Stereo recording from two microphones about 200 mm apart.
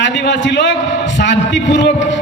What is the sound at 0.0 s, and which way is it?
A man's voice, 60° left (ahead or behind).